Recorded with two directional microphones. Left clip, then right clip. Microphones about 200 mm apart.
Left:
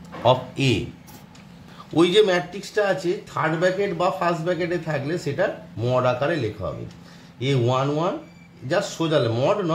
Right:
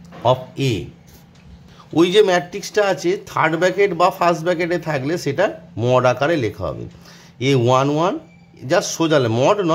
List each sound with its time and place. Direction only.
0.2 s speech: 25° right (ahead or behind)
2.0 s speech: 30° right (ahead or behind)